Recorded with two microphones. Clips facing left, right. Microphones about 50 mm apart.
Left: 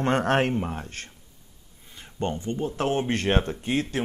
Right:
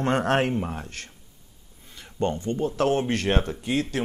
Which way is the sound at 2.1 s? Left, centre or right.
Left.